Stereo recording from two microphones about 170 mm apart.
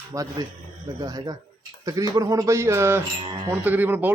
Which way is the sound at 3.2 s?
35° right (ahead or behind).